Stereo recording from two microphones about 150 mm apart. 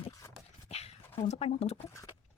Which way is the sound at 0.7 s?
45° left (ahead or behind).